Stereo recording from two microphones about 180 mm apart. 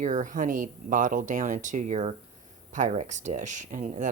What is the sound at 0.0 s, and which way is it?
Speech, 45° right (ahead or behind).